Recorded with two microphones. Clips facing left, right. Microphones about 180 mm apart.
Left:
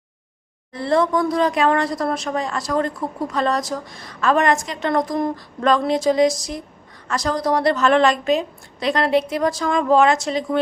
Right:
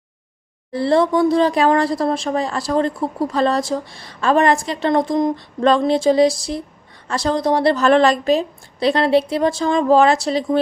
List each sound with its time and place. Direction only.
0.7 s a woman's voice: 30° right (ahead or behind)